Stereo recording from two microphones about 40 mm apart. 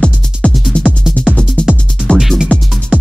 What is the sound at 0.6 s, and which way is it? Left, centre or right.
Music, centre.